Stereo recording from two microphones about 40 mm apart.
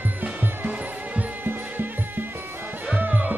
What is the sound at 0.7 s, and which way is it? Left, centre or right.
Music, right.